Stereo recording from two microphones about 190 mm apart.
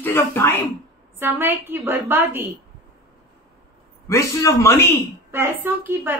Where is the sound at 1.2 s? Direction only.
10° right (ahead or behind).